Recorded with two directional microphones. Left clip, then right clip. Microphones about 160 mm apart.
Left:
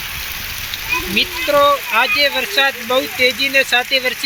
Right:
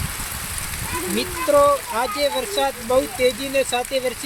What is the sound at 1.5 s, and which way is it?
Speech, 20° left (ahead or behind).